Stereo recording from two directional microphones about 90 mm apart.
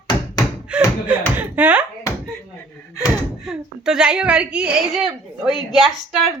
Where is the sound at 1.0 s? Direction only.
20° right (ahead or behind).